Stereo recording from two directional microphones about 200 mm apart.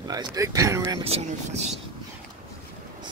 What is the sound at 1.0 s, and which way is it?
Speech, 30° right (ahead or behind).